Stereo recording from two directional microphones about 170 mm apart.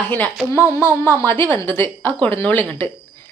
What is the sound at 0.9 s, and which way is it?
A woman's voice, 15° left (ahead or behind).